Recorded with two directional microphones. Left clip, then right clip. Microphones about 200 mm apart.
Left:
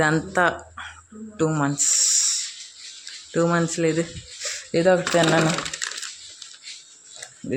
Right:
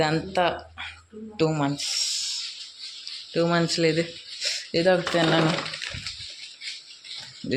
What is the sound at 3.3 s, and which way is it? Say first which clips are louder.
Speech: left 1 dB; 15° left (ahead or behind).